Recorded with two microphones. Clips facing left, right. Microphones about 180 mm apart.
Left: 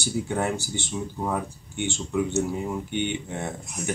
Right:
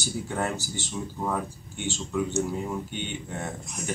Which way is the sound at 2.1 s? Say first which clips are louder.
Left 2 dB; 10° left (ahead or behind).